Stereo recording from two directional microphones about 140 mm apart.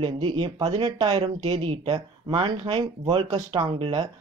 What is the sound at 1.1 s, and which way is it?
Speech, 45° right (ahead or behind).